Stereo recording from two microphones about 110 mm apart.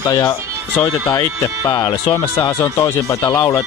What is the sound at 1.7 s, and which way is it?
Speech, 40° left (ahead or behind).